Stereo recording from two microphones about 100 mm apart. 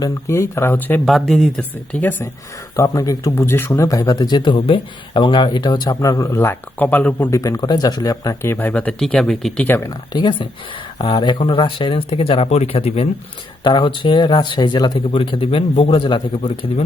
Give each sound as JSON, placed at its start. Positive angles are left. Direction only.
{"t": 0.0, "sound": "speech", "side_deg": 30}
{"t": 1.0, "sound": "speech", "side_deg": 0}
{"t": 2.0, "sound": "speech", "side_deg": 20}
{"t": 2.7, "sound": "speech", "side_deg": 35}
{"t": 3.3, "sound": "speech", "side_deg": 25}
{"t": 4.5, "sound": "speech", "side_deg": 65}
{"t": 6.3, "sound": "speech", "side_deg": 20}
{"t": 7.3, "sound": "speech", "side_deg": 35}
{"t": 9.6, "sound": "speech", "side_deg": 20}
{"t": 10.1, "sound": "speech", "side_deg": 50}
{"t": 13.7, "sound": "speech", "side_deg": 55}